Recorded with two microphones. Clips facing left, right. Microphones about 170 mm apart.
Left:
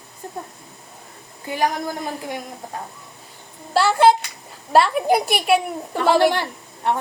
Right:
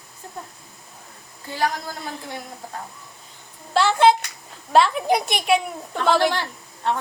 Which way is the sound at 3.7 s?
5° left (ahead or behind).